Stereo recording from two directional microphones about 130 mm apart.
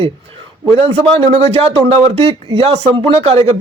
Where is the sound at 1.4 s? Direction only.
50° right (ahead or behind).